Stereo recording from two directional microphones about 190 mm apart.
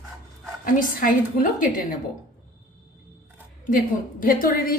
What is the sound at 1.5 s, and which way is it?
Speech, 45° left (ahead or behind).